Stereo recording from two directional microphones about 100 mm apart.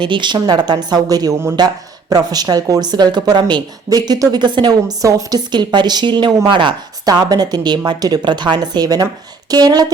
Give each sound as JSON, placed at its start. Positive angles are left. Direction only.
{"t": 0.0, "sound": "a woman's voice", "side_deg": -55}
{"t": 5.0, "sound": "speech", "side_deg": -40}
{"t": 7.0, "sound": "a woman's voice", "side_deg": -40}